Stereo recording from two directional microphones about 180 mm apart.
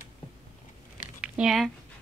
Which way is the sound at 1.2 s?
5° right (ahead or behind).